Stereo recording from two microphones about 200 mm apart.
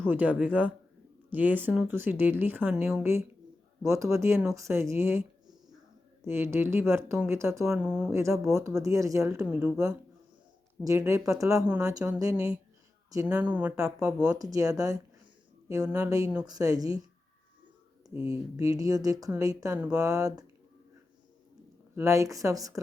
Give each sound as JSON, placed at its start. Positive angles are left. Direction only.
{"t": 0.1, "sound": "speech", "side_deg": -10}
{"t": 8.5, "sound": "speech", "side_deg": -15}
{"t": 10.8, "sound": "speech", "side_deg": -15}
{"t": 14.5, "sound": "speech", "side_deg": -15}
{"t": 18.1, "sound": "speech", "side_deg": 30}
{"t": 18.5, "sound": "speech", "side_deg": -15}
{"t": 21.9, "sound": "speech", "side_deg": -15}